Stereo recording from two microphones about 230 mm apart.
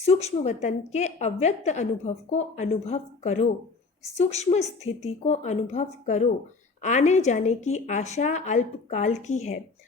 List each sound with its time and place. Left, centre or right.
0.0 s a woman's voice: left